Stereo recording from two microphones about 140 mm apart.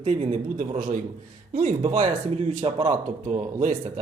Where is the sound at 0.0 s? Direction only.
60° right (ahead or behind).